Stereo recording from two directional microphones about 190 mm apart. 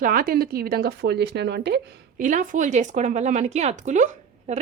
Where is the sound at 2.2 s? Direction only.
45° right (ahead or behind).